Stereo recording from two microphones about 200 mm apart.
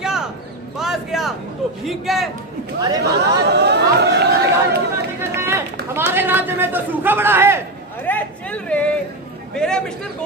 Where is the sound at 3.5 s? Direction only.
55° right (ahead or behind).